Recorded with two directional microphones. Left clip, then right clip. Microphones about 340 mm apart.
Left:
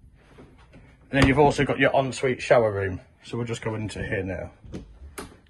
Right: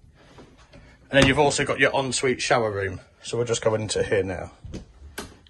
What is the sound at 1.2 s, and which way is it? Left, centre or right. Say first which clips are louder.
Speech: left 5 dB; centre.